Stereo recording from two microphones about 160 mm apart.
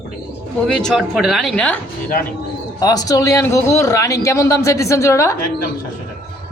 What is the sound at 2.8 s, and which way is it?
A man's voice, 25° left (ahead or behind).